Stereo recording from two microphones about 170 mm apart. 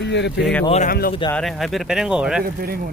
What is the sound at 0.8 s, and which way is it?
Speech, 60° left (ahead or behind).